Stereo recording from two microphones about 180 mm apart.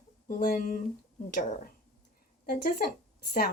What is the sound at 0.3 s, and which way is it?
Speech, 55° left (ahead or behind).